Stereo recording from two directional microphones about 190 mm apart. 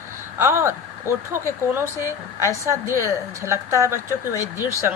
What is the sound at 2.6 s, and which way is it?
A woman's voice, 15° right (ahead or behind).